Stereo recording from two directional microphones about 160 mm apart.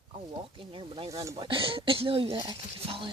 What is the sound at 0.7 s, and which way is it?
Speech, 30° right (ahead or behind).